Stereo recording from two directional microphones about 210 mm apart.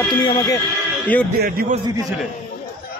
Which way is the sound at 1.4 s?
45° right (ahead or behind).